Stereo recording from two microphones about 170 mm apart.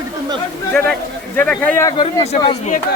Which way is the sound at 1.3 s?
10° left (ahead or behind).